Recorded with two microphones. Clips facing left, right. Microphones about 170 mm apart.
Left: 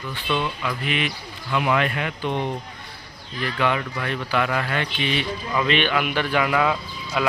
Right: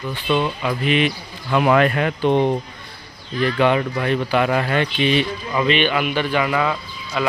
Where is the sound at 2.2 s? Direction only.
30° right (ahead or behind).